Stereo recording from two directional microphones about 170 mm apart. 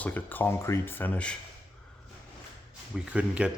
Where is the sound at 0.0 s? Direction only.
10° left (ahead or behind).